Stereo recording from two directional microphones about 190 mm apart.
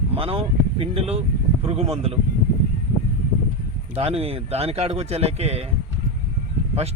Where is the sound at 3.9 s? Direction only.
30° right (ahead or behind).